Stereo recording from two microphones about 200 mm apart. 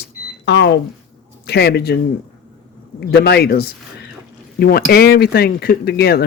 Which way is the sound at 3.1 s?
55° left (ahead or behind).